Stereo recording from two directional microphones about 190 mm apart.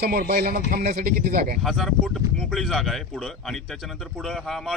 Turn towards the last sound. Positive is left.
turn(degrees=0)  # may be behind; listen again after turning